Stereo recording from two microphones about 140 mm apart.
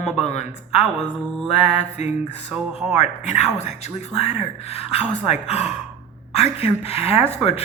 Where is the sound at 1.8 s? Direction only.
50° left (ahead or behind).